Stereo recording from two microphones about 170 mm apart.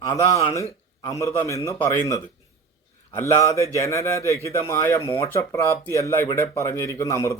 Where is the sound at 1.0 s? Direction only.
20° left (ahead or behind).